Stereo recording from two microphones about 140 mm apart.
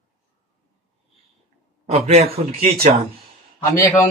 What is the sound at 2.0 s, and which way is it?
Speech, 45° right (ahead or behind).